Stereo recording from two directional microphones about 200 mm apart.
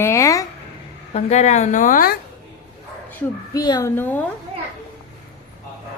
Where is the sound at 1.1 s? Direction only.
35° left (ahead or behind).